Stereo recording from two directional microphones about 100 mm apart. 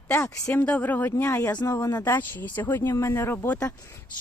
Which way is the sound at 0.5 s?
15° left (ahead or behind).